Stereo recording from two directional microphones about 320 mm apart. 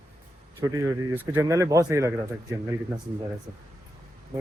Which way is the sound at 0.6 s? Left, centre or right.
Centre.